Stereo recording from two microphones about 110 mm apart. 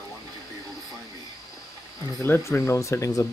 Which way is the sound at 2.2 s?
25° left (ahead or behind).